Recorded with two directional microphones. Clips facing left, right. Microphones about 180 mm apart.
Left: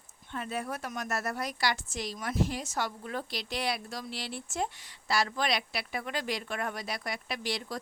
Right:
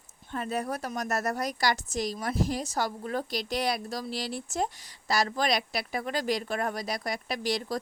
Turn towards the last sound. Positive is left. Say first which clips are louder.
# right 5 dB
turn(degrees=-40)  # may be behind; listen again after turning